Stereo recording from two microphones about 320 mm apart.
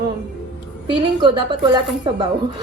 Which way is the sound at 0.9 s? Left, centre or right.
Centre.